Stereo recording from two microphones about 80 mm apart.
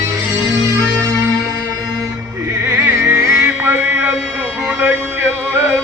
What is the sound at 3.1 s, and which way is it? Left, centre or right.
Music, right.